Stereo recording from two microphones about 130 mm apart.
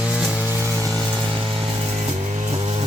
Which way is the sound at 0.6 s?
25° right (ahead or behind).